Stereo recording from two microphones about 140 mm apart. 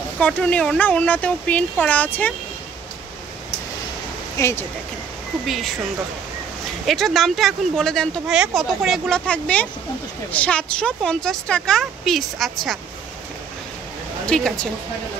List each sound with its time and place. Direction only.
0.2 s speech: 10° left (ahead or behind)
4.4 s speech: 20° left (ahead or behind)
6.9 s speech: centre (ahead or behind)
14.2 s speech: 5° left (ahead or behind)